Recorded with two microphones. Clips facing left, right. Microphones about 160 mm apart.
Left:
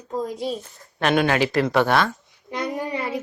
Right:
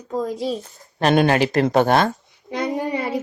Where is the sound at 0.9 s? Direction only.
35° right (ahead or behind).